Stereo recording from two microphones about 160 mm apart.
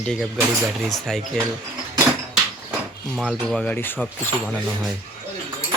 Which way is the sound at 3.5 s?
5° left (ahead or behind).